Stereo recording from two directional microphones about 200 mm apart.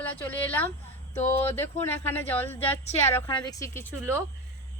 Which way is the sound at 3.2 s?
25° left (ahead or behind).